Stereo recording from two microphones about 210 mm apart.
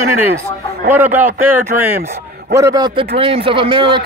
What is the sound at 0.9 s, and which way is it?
A man's voice, 10° right (ahead or behind).